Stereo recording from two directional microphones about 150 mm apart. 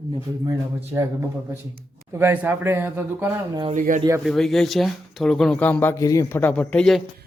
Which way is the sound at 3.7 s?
60° right (ahead or behind).